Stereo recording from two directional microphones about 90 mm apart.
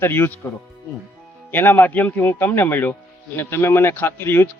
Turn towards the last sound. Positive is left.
turn(degrees=25)  # may be behind; listen again after turning